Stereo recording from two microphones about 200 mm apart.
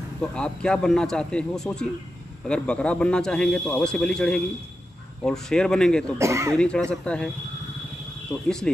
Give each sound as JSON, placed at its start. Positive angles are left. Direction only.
{"t": 0.2, "sound": "a man's voice", "side_deg": 5}
{"t": 6.1, "sound": "speech", "side_deg": -15}
{"t": 6.5, "sound": "a man's voice", "side_deg": 5}
{"t": 8.3, "sound": "a man's voice", "side_deg": 5}